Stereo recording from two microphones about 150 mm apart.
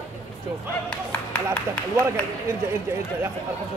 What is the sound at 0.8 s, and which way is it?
Speech, 10° left (ahead or behind).